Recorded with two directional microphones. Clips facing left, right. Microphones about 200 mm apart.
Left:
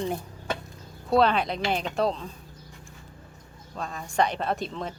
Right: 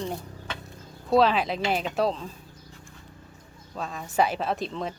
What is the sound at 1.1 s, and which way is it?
Speech, centre (ahead or behind).